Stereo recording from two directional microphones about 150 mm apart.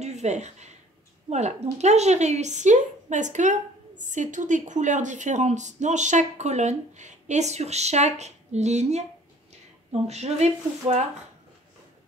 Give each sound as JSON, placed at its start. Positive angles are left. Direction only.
{"t": 0.0, "sound": "a woman's voice", "side_deg": -50}
{"t": 10.0, "sound": "a woman's voice", "side_deg": -45}